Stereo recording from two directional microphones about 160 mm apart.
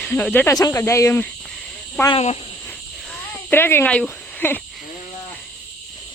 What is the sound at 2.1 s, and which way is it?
Speech, 40° left (ahead or behind).